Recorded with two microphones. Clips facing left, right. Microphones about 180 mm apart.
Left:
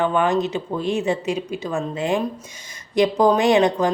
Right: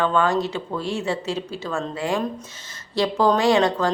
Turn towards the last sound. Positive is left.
turn(degrees=20)  # may be behind; listen again after turning